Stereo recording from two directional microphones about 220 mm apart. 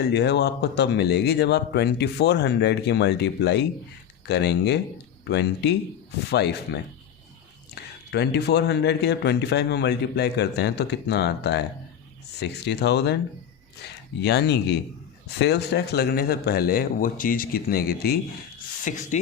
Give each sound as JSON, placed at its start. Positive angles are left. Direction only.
{"t": 0.0, "sound": "speech", "side_deg": 50}
{"t": 8.1, "sound": "speech", "side_deg": 50}
{"t": 14.2, "sound": "speech", "side_deg": 50}